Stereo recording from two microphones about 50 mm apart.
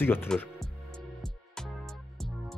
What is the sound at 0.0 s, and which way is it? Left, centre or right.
Speech, left.